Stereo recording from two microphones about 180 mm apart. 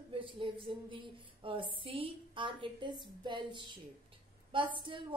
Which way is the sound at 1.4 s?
30° right (ahead or behind).